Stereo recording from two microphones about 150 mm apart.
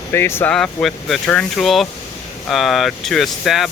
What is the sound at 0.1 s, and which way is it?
Speech, 15° left (ahead or behind).